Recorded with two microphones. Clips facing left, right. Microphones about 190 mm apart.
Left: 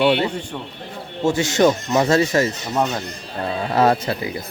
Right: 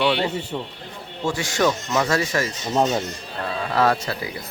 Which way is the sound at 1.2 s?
25° left (ahead or behind).